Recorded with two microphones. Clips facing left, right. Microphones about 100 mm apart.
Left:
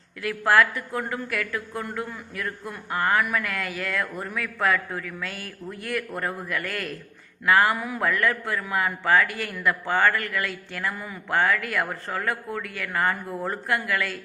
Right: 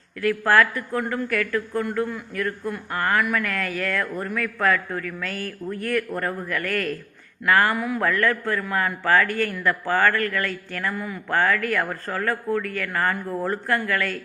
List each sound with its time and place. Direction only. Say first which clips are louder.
0.2 s a man's voice: right 2 dB; 20° left (ahead or behind)